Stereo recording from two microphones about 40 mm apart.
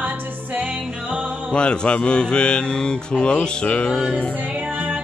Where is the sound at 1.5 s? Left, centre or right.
Left.